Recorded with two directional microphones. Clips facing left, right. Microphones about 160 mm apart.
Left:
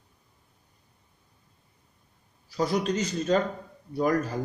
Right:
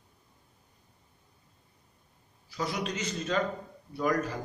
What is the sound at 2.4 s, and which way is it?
Speech, 40° left (ahead or behind).